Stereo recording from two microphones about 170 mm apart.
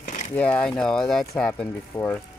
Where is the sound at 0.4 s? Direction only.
10° left (ahead or behind).